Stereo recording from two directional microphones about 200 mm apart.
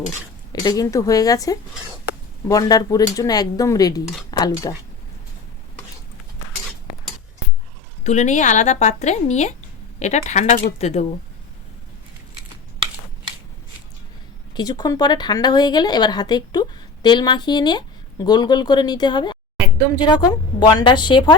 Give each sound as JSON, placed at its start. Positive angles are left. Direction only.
{"t": 0.6, "sound": "speech", "side_deg": 15}
{"t": 8.0, "sound": "speech", "side_deg": 35}
{"t": 14.5, "sound": "speech", "side_deg": 20}